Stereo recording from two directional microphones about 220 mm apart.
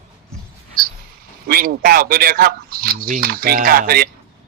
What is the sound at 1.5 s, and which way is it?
Speech, 45° right (ahead or behind).